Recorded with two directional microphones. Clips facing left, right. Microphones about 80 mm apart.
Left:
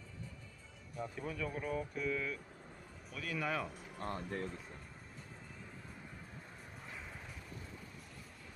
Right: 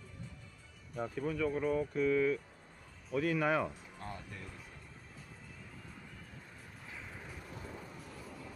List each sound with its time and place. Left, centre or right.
1.2 s speech: right
4.0 s speech: left